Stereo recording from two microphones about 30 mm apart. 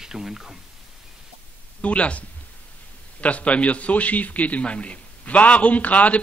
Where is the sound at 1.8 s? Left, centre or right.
Left.